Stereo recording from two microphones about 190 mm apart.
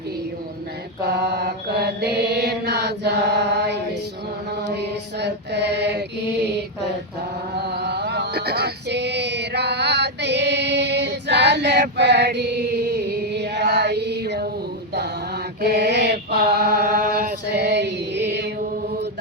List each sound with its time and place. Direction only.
1.0 s mantra: 60° right (ahead or behind)
7.6 s music: 60° right (ahead or behind)
15.6 s mantra: 60° right (ahead or behind)